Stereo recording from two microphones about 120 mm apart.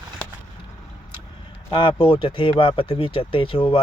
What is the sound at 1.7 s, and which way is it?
Speech, 45° left (ahead or behind).